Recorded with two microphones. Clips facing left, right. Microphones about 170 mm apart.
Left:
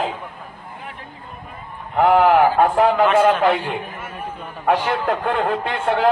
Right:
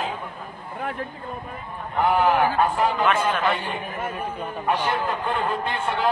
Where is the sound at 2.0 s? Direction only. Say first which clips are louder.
Left 6 dB; 80° left.